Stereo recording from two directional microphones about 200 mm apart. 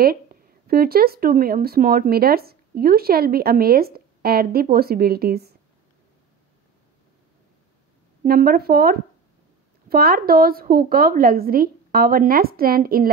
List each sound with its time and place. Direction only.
0.0 s speech: 50° right (ahead or behind)
8.2 s speech: 45° right (ahead or behind)